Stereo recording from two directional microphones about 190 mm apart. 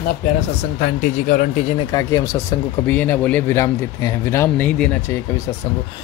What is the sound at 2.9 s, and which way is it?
Speech, 10° left (ahead or behind).